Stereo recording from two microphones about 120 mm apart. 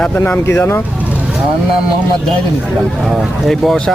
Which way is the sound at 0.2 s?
20° left (ahead or behind).